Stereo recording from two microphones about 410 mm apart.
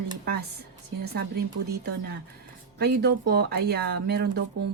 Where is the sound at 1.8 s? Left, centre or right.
Right.